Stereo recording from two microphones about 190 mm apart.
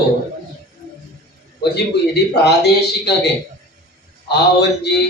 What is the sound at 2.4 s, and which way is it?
Speech, 60° left (ahead or behind).